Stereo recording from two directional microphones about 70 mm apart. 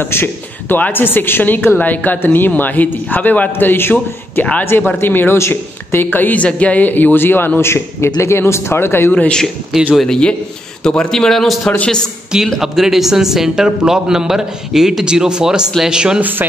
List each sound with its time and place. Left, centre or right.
0.0 s a man's voice: left
9.1 s a man's voice: centre
9.9 s a man's voice: centre
12.5 s a man's voice: centre
16.2 s speech: right